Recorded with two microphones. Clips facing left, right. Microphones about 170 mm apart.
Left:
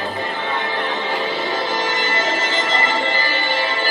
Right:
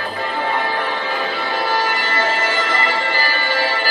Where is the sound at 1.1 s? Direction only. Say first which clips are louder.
Left 1 dB; 20° left (ahead or behind).